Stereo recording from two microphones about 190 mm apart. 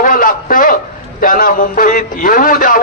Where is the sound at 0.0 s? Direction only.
45° left (ahead or behind).